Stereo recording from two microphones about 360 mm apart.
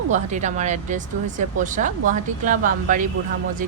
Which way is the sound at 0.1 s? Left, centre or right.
Centre.